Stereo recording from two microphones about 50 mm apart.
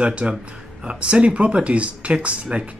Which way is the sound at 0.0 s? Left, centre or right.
Right.